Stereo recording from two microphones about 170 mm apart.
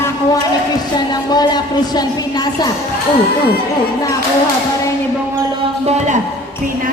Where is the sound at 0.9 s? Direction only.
25° left (ahead or behind).